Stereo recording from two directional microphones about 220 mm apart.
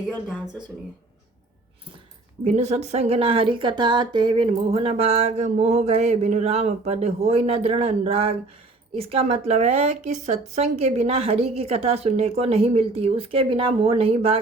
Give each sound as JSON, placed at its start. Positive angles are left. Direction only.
{"t": 2.4, "sound": "a woman's voice", "side_deg": -30}